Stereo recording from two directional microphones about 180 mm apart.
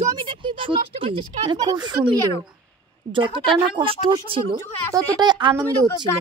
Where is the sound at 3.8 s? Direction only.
30° right (ahead or behind).